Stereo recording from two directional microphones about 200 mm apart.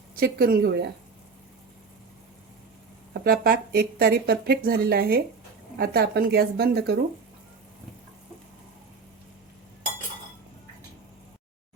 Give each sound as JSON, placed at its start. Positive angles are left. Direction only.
{"t": 0.2, "sound": "speech", "side_deg": -50}
{"t": 3.1, "sound": "speech", "side_deg": -50}